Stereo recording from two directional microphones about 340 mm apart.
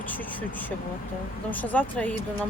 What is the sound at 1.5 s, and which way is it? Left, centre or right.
Speech, centre.